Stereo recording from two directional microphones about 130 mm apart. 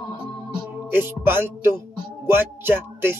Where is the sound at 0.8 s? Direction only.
15° right (ahead or behind).